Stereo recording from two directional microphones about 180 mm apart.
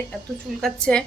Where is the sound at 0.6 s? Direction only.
5° left (ahead or behind).